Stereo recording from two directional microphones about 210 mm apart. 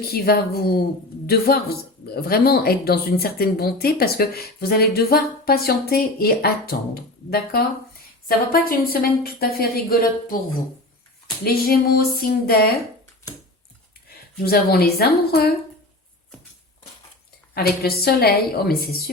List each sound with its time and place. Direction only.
0.0 s speech: 45° left (ahead or behind)
11.4 s speech: 45° left (ahead or behind)
14.4 s speech: 45° left (ahead or behind)
17.5 s speech: 45° left (ahead or behind)